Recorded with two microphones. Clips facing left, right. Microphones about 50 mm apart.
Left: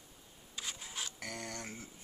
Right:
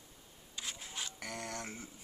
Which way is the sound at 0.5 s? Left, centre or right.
Centre.